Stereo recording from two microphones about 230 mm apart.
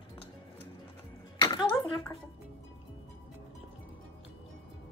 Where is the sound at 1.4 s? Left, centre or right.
Centre.